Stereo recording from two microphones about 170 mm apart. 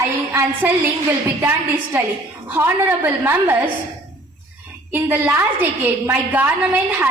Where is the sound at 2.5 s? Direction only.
15° right (ahead or behind).